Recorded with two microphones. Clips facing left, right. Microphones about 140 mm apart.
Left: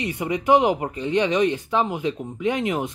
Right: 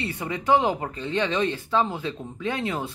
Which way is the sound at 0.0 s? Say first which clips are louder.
Left 4 dB; 15° left (ahead or behind).